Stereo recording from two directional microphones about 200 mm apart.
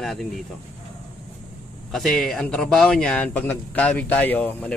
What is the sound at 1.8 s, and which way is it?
A man's voice, centre (ahead or behind).